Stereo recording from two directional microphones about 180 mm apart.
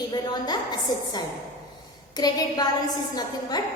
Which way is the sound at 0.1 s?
25° left (ahead or behind).